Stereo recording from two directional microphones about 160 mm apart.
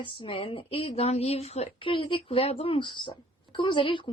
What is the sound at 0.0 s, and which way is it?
A woman's voice, 35° left (ahead or behind).